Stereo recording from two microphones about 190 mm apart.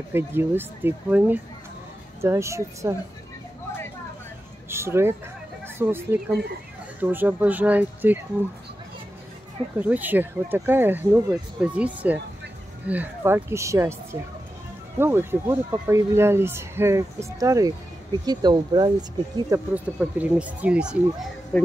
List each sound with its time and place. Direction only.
0.1 s speech: 10° right (ahead or behind)
4.6 s speech: 15° right (ahead or behind)
9.8 s speech: 10° right (ahead or behind)
15.0 s speech: 10° right (ahead or behind)
19.7 s speech: 10° right (ahead or behind)